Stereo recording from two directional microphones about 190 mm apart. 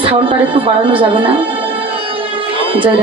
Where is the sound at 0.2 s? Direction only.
25° right (ahead or behind).